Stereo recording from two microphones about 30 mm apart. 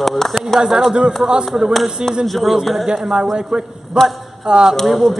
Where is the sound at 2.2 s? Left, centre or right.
Centre.